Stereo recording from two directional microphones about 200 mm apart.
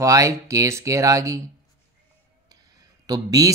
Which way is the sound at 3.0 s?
20° right (ahead or behind).